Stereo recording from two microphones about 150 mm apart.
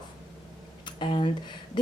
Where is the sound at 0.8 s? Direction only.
30° left (ahead or behind).